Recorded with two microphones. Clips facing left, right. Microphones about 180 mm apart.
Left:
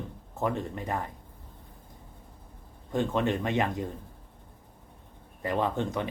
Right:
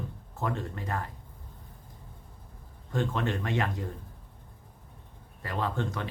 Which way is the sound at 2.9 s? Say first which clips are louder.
Left 3 dB; 20° left (ahead or behind).